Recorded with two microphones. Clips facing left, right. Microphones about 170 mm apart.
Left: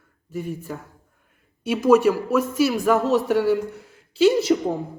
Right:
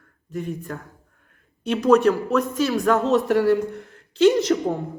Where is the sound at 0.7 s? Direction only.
10° left (ahead or behind).